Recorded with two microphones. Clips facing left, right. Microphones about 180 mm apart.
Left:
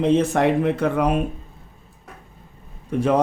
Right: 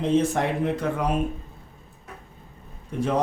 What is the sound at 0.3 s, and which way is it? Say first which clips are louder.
Speech: left 6 dB; 75° left (ahead or behind).